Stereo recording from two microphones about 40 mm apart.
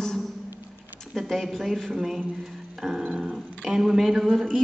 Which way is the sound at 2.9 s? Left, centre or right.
Right.